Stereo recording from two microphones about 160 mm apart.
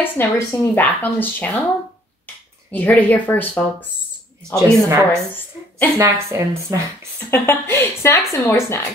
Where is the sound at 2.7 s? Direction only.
10° left (ahead or behind).